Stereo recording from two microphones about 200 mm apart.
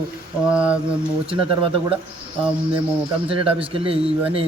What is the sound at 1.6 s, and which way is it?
Speech, 25° right (ahead or behind).